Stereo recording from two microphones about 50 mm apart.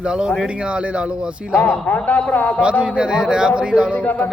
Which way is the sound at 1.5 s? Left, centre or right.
Left.